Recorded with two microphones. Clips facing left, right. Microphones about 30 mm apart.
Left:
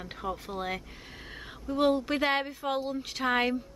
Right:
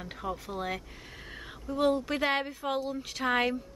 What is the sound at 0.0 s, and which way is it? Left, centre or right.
Speech, centre.